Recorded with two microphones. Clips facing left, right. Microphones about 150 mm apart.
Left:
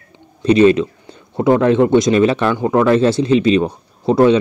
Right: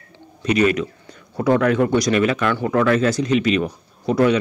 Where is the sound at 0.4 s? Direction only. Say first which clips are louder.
Left 7 dB; 30° left (ahead or behind).